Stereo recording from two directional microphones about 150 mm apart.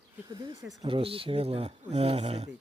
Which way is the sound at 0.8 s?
35° right (ahead or behind).